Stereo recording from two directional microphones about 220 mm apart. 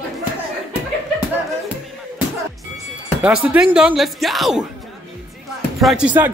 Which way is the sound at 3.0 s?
5° right (ahead or behind).